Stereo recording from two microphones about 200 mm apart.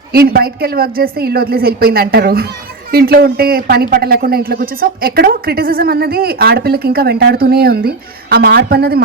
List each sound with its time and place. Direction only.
0.1 s speech: 50° right (ahead or behind)